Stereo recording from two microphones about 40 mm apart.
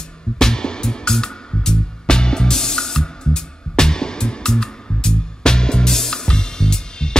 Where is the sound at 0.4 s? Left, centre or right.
Centre.